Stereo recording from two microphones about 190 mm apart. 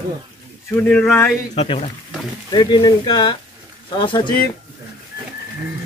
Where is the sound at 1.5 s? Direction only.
35° left (ahead or behind).